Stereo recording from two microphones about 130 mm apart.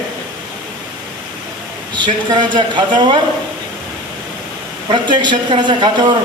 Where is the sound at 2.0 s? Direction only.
35° right (ahead or behind).